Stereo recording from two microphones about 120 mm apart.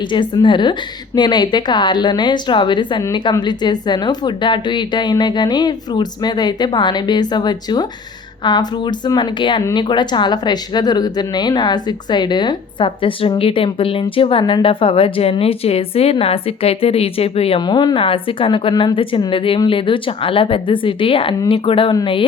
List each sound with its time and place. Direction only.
0.0 s speech: 40° left (ahead or behind); by 17.6 s 55° left (ahead or behind)
17.6 s speech: 40° left (ahead or behind)